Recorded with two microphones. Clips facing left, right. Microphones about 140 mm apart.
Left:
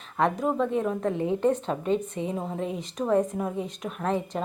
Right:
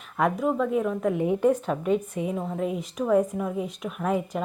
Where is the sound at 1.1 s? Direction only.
15° right (ahead or behind).